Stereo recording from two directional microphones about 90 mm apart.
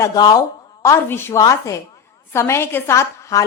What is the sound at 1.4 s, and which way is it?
Speech, 40° left (ahead or behind).